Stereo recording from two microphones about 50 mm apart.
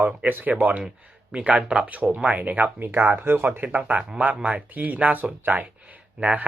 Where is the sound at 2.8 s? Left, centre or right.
Right.